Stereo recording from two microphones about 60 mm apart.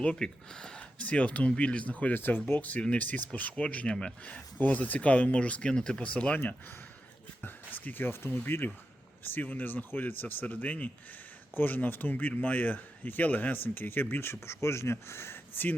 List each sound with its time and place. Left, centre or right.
0.0 s a man's voice: centre
7.4 s speech: left
9.2 s speech: left